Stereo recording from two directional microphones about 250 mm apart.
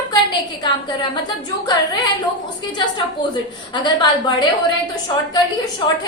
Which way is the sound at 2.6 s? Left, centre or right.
Centre.